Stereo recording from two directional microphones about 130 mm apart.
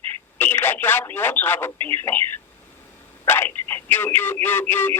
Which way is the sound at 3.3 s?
15° left (ahead or behind).